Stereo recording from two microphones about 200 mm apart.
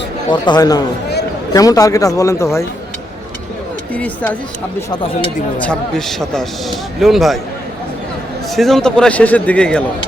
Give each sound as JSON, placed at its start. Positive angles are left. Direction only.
{"t": 0.3, "sound": "a man's voice", "side_deg": 20}
{"t": 3.9, "sound": "a man's voice", "side_deg": 10}
{"t": 5.5, "sound": "speech", "side_deg": 5}
{"t": 8.5, "sound": "speech", "side_deg": 0}